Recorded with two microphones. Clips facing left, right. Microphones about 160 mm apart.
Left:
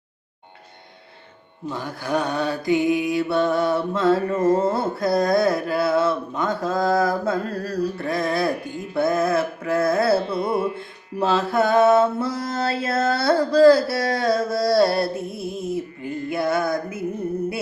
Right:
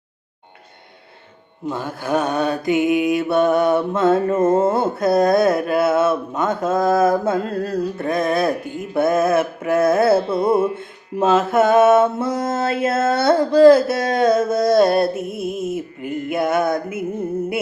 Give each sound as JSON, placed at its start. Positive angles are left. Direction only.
{"t": 1.9, "sound": "mantra", "side_deg": -20}
{"t": 15.2, "sound": "music", "side_deg": -20}